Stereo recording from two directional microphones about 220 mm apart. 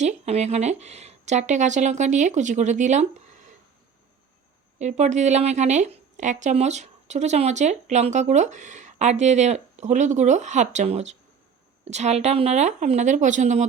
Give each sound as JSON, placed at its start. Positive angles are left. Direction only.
{"t": 0.0, "sound": "a woman's voice", "side_deg": -30}
{"t": 4.8, "sound": "a woman's voice", "side_deg": -30}